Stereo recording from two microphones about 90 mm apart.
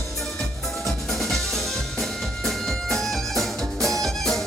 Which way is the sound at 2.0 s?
5° left (ahead or behind).